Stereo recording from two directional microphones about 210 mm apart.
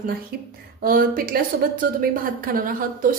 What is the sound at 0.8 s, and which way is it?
A woman's voice, 45° right (ahead or behind).